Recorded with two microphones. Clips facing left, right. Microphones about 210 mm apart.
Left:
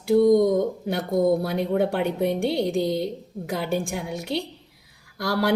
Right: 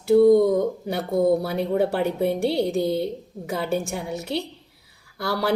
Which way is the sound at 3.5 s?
Centre (ahead or behind).